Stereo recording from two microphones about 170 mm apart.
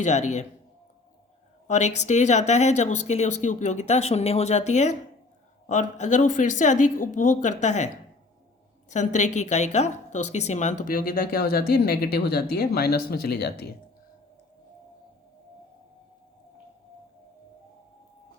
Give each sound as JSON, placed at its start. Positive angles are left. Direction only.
{"t": 0.0, "sound": "speech", "side_deg": 45}
{"t": 1.6, "sound": "a woman's voice", "side_deg": 45}
{"t": 8.9, "sound": "a woman's voice", "side_deg": 45}